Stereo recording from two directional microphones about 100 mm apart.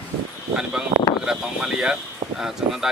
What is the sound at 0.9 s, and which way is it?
Speech, 50° right (ahead or behind).